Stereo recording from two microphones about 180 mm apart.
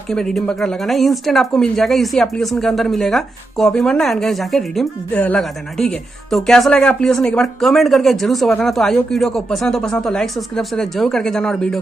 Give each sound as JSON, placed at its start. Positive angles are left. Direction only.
{"t": 0.1, "sound": "speech", "side_deg": 5}